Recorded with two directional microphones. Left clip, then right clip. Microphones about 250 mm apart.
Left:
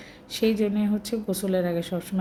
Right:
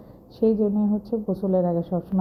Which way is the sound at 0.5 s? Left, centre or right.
Left.